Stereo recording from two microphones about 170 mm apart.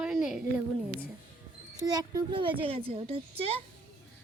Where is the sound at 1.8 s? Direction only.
25° right (ahead or behind).